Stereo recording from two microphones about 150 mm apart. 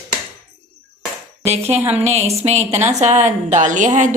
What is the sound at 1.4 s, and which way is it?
A woman's voice, 45° right (ahead or behind).